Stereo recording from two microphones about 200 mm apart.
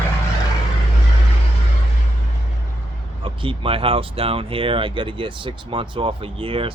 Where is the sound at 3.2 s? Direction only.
25° right (ahead or behind).